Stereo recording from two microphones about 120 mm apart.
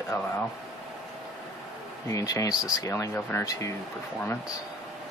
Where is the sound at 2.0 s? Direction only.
30° left (ahead or behind).